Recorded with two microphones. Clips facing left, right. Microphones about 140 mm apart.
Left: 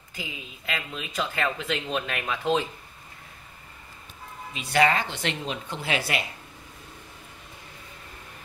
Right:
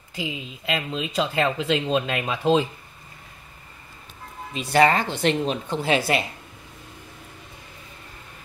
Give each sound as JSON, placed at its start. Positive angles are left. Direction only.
{"t": 0.3, "sound": "speech", "side_deg": -20}
{"t": 4.6, "sound": "speech", "side_deg": -40}